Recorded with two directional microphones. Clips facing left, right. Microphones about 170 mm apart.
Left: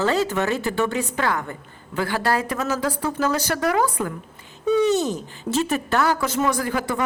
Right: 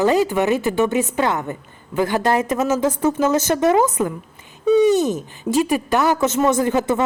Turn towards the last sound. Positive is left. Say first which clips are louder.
# right 6 dB
turn(degrees=-20)  # may be behind; listen again after turning